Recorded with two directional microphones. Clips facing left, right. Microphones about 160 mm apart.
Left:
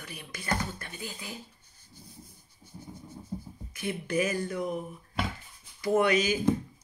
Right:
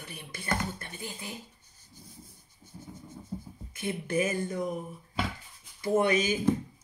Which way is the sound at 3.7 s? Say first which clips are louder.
Even; 25° right (ahead or behind).